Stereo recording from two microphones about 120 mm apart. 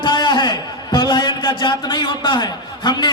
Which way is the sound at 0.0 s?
40° left (ahead or behind).